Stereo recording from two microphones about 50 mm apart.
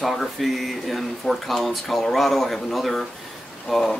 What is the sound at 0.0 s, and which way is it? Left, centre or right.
Speech, centre.